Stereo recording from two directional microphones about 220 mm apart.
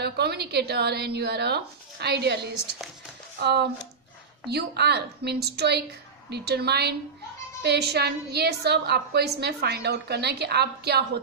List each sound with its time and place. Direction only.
0.0 s a woman's voice: 50° right (ahead or behind)